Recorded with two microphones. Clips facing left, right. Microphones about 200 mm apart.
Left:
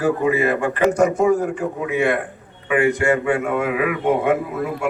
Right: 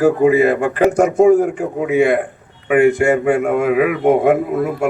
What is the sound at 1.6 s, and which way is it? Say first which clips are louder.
Speech: right 4 dB; 55° right (ahead or behind).